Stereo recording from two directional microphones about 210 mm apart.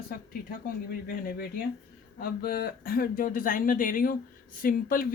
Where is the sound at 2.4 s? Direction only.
45° left (ahead or behind).